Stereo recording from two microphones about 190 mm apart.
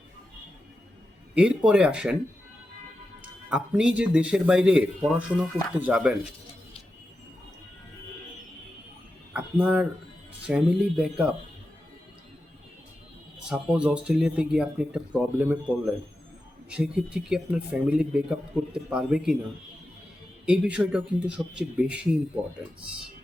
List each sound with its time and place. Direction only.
1.4 s speech: 5° right (ahead or behind)
3.2 s speech: 5° right (ahead or behind)
9.3 s speech: 5° right (ahead or behind)
13.5 s speech: 5° right (ahead or behind)
20.4 s speech: 5° right (ahead or behind)